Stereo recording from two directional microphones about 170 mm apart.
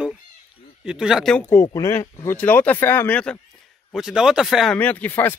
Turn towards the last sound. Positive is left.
turn(degrees=10)  # may be behind; listen again after turning